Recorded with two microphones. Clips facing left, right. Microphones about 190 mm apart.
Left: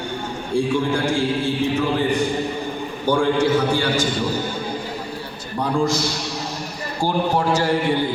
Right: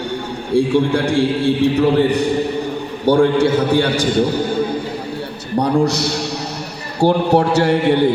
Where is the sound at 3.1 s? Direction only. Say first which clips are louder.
Right 5 dB; 65° right (ahead or behind).